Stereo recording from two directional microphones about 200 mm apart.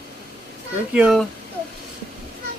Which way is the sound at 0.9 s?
Centre (ahead or behind).